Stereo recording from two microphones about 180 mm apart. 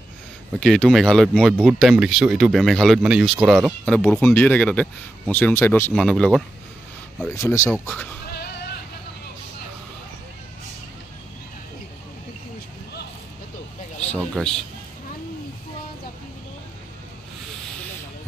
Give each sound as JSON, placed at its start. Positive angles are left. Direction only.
{"t": 0.6, "sound": "speech", "side_deg": 5}
{"t": 3.8, "sound": "speech", "side_deg": 5}
{"t": 7.2, "sound": "speech", "side_deg": 15}
{"t": 14.1, "sound": "speech", "side_deg": 5}